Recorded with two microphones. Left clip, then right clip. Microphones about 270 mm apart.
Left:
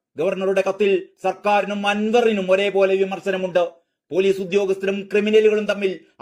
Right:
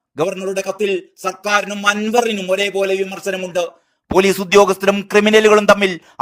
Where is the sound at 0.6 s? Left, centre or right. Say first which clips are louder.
Even; right.